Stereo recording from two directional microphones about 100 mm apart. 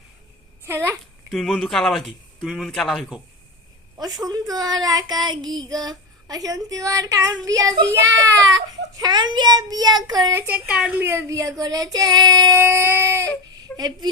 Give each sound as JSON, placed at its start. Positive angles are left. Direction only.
{"t": 0.6, "sound": "a child's voice", "side_deg": -25}
{"t": 1.3, "sound": "speech", "side_deg": 0}
{"t": 3.9, "sound": "speech", "side_deg": -40}
{"t": 9.0, "sound": "speech", "side_deg": -45}
{"t": 10.3, "sound": "a woman's voice", "side_deg": -15}
{"t": 12.5, "sound": "a sound", "side_deg": -25}
{"t": 13.7, "sound": "speech", "side_deg": -40}